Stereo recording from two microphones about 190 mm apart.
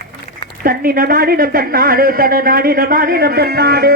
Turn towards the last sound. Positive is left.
turn(degrees=-55)  # may be behind; listen again after turning